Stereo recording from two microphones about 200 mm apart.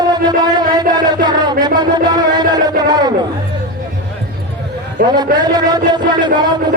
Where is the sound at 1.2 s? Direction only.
20° right (ahead or behind).